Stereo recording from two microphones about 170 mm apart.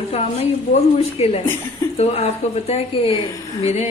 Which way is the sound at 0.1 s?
35° left (ahead or behind).